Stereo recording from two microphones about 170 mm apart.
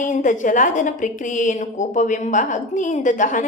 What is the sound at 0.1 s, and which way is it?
A woman's voice, 50° left (ahead or behind).